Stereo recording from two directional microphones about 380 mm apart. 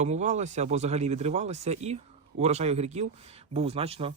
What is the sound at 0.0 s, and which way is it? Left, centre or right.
Speech, centre.